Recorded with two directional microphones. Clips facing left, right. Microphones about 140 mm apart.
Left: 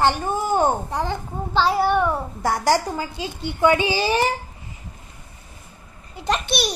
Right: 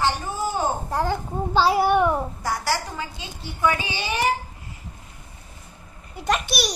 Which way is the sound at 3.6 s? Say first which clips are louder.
Left 6 dB; 30° left (ahead or behind).